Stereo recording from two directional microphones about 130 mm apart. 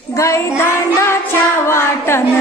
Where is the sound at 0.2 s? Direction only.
20° left (ahead or behind).